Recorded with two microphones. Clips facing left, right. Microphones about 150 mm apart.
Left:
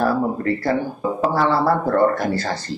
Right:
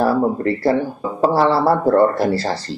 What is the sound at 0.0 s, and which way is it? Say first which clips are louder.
Speech: right 3 dB; 30° right (ahead or behind).